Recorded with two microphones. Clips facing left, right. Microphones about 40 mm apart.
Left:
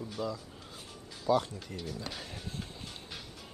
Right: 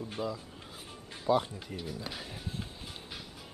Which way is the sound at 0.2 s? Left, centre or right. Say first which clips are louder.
Even; right.